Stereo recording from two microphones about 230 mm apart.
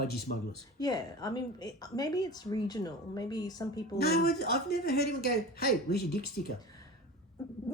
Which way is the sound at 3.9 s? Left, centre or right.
Left.